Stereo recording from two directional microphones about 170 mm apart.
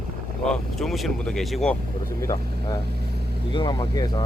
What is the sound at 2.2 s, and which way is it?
Speech, 20° left (ahead or behind).